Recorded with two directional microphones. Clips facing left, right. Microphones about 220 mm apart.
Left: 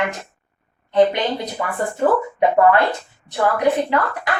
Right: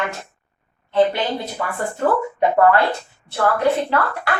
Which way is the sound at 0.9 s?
15° left (ahead or behind).